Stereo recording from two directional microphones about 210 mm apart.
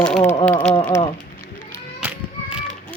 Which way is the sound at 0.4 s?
5° left (ahead or behind).